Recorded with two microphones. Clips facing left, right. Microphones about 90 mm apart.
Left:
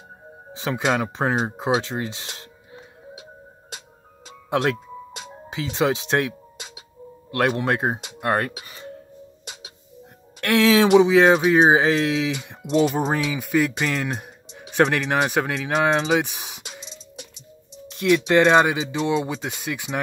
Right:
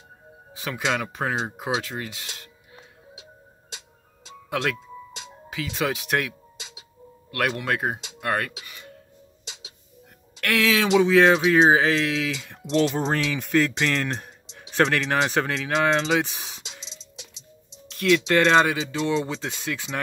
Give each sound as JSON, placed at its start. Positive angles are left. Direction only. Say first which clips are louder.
{"t": 0.5, "sound": "speech", "louder": "left 4 dB", "side_deg": 25}
{"t": 4.7, "sound": "music", "louder": "left 3 dB", "side_deg": 55}
{"t": 5.5, "sound": "speech", "louder": "left 5 dB", "side_deg": 25}
{"t": 8.6, "sound": "doorbell", "louder": "left 6 dB", "side_deg": 30}
{"t": 9.4, "sound": "tick-tock", "louder": "even", "side_deg": 55}
{"t": 10.4, "sound": "speech", "louder": "left 5 dB", "side_deg": 25}
{"t": 11.0, "sound": "speech", "louder": "left 2 dB", "side_deg": 15}
{"t": 12.7, "sound": "speech", "louder": "left 2 dB", "side_deg": 10}
{"t": 16.8, "sound": "music", "louder": "left 5 dB", "side_deg": 50}
{"t": 17.8, "sound": "speech", "louder": "left 2 dB", "side_deg": 15}